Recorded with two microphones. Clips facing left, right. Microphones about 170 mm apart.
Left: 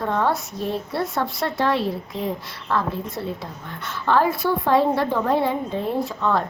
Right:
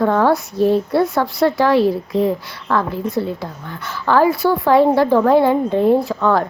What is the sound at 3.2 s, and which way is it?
A woman's voice, 90° right.